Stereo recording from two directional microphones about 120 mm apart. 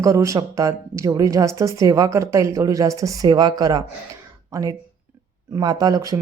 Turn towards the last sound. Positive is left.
turn(degrees=-30)  # may be behind; listen again after turning